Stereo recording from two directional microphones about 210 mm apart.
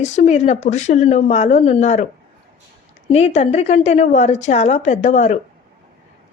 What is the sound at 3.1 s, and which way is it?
A woman's voice, 30° left (ahead or behind).